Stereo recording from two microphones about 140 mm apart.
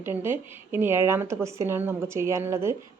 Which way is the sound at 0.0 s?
15° right (ahead or behind).